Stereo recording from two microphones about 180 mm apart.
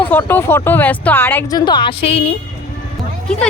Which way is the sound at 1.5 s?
25° left (ahead or behind).